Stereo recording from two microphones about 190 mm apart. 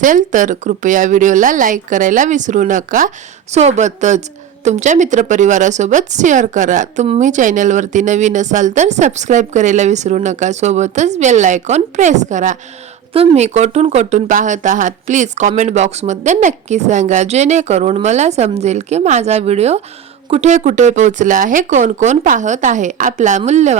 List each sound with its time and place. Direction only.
0.0 s speech: 40° right (ahead or behind)